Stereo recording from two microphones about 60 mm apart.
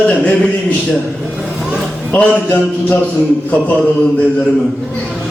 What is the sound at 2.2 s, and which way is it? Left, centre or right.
Speech, left.